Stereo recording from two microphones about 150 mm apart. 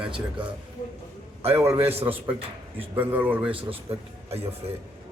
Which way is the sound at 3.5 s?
35° right (ahead or behind).